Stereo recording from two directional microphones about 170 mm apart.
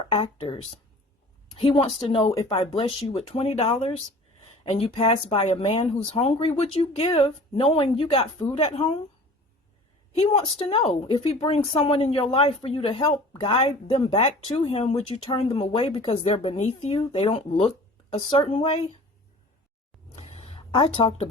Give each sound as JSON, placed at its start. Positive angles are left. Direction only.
{"t": 0.0, "sound": "speech", "side_deg": 35}
{"t": 10.2, "sound": "speech", "side_deg": 35}
{"t": 20.1, "sound": "a sound", "side_deg": 40}